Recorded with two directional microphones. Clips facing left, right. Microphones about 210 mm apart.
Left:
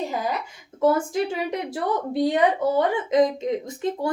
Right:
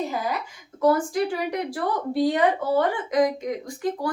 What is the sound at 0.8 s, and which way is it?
Speech, 25° left (ahead or behind).